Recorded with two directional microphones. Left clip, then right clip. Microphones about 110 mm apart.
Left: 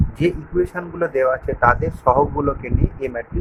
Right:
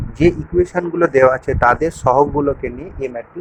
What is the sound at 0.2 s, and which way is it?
Speech, 20° right (ahead or behind).